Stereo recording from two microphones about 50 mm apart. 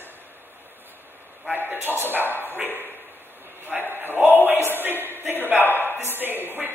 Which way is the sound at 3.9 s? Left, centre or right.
Right.